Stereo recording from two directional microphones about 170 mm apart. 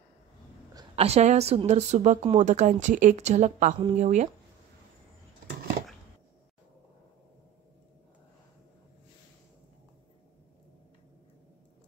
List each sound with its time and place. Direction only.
0.9 s a woman's voice: 35° right (ahead or behind)